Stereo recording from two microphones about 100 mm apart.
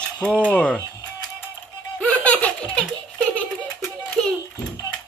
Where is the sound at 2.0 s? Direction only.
15° left (ahead or behind).